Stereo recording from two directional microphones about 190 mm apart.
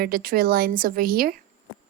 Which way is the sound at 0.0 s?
50° right (ahead or behind).